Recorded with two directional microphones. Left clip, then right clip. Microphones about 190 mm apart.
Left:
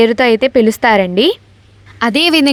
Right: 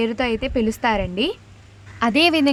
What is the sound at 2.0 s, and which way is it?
Speech, 25° left (ahead or behind).